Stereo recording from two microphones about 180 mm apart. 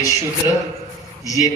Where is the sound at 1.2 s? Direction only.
20° left (ahead or behind).